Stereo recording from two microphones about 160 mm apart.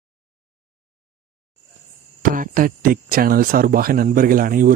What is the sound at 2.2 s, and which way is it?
Speech, 60° right (ahead or behind).